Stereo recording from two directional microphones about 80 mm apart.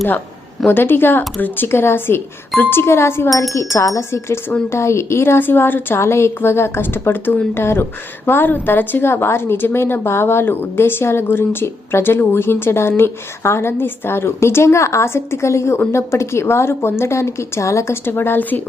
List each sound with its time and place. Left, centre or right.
0.7 s a woman's voice: left